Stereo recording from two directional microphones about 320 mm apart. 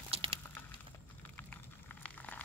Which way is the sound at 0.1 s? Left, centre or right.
Centre.